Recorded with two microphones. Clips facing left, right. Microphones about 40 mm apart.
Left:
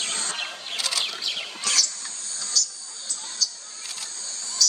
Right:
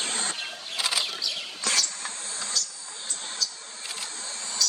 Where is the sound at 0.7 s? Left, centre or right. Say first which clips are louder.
Right 1 dB; centre.